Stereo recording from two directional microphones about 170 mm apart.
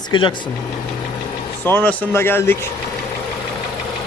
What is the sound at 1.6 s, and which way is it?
Speech, 10° left (ahead or behind).